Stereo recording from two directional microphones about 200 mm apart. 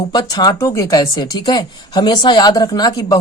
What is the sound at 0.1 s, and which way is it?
A man's voice, 20° left (ahead or behind).